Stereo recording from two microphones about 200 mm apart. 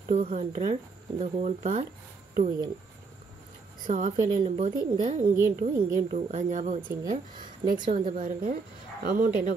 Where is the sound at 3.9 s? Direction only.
40° right (ahead or behind).